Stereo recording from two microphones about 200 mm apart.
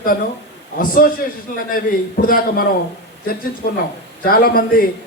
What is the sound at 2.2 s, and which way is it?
Speech, 45° left (ahead or behind).